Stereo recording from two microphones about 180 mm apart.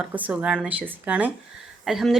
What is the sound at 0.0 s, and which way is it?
Speech, 10° right (ahead or behind).